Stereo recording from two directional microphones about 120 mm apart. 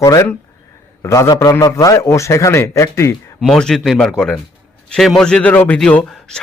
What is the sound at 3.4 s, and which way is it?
A man's voice, 5° left (ahead or behind).